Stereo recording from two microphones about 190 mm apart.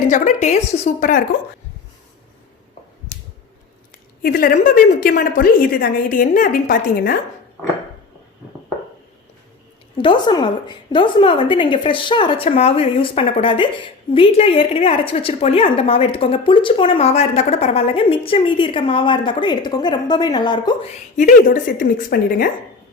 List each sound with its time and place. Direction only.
0.1 s a woman's voice: 40° left (ahead or behind)
4.2 s a woman's voice: 50° left (ahead or behind)
10.0 s a woman's voice: 25° left (ahead or behind)
21.2 s a woman's voice: 45° left (ahead or behind)